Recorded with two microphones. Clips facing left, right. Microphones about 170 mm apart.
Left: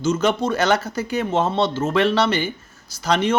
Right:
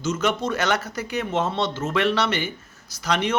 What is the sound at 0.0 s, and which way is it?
Speech, 30° left (ahead or behind).